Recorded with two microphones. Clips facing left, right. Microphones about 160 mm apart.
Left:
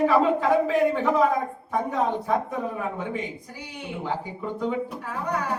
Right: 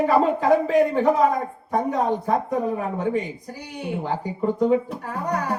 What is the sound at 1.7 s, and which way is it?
Music, 40° right (ahead or behind).